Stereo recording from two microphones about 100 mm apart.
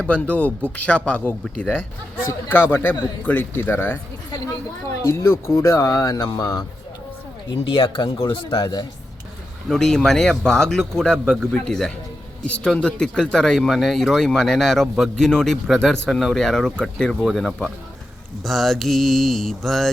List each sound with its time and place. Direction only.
0.0 s speech: 10° left (ahead or behind)
5.0 s speech: 25° left (ahead or behind)
7.6 s speech: 55° left (ahead or behind)
9.6 s speech: 5° left (ahead or behind)